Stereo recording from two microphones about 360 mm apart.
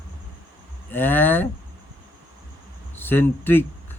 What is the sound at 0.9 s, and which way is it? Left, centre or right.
Speech, centre.